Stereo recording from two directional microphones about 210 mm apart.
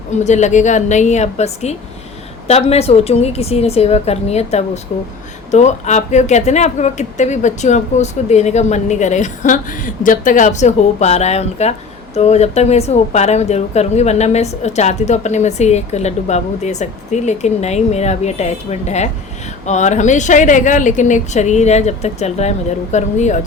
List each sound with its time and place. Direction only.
0.3 s a woman's voice: 35° left (ahead or behind)